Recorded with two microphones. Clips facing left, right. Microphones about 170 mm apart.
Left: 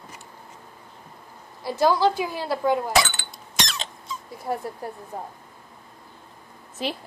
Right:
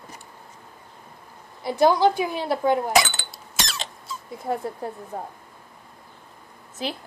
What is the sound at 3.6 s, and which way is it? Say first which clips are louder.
Squeak: left 1 dB; 5° right (ahead or behind).